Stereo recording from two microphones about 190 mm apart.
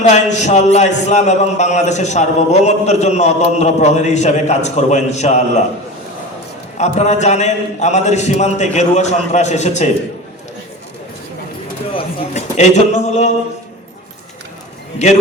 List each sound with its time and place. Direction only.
0.1 s a man's voice: 35° left (ahead or behind)
6.7 s a man's voice: 35° left (ahead or behind)
11.9 s a man's voice: 35° left (ahead or behind)